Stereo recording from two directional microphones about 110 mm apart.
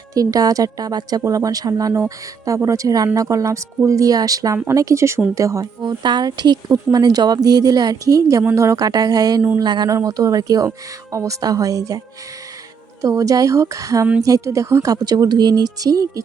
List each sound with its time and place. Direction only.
0.1 s a woman's voice: 35° right (ahead or behind)